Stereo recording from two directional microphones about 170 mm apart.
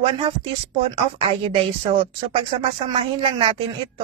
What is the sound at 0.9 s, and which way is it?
A woman's voice, 30° right (ahead or behind).